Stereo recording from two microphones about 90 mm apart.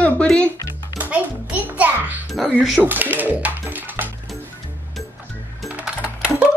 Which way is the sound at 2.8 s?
20° right (ahead or behind).